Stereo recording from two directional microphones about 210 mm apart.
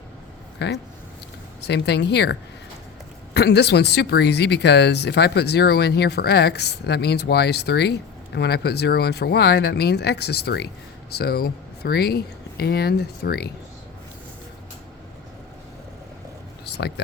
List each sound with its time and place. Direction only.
1.6 s speech: 55° left (ahead or behind)